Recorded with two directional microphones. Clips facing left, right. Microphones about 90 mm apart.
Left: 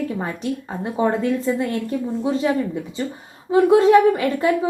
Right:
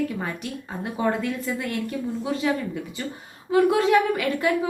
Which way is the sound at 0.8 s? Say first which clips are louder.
Left 4 dB; 25° left (ahead or behind).